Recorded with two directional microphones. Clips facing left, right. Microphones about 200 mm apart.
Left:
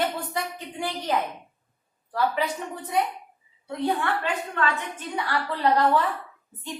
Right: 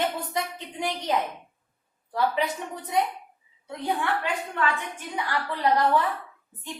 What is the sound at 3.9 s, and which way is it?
A woman's voice, 15° right (ahead or behind).